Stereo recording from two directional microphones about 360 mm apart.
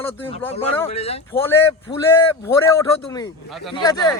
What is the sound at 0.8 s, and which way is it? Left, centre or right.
Speech, centre.